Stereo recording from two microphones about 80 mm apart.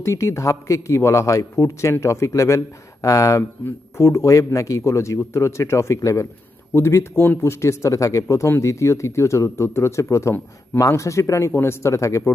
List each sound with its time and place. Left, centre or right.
0.0 s speech: left